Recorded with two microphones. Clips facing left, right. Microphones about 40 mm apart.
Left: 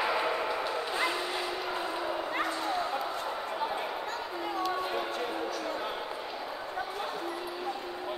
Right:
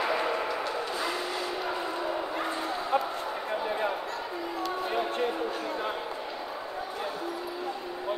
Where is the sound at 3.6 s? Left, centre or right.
Centre.